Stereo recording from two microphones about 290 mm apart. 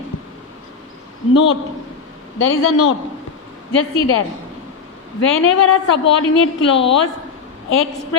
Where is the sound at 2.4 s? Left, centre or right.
Left.